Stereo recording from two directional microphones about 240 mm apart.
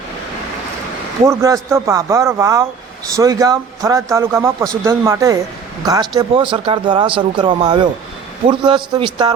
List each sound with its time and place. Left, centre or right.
1.2 s speech: centre